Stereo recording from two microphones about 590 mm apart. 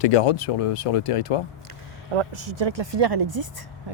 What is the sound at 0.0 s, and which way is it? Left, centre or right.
Speech, left.